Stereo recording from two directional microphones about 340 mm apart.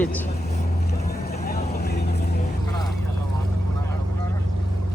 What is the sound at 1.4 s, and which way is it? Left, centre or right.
Vehicle, left.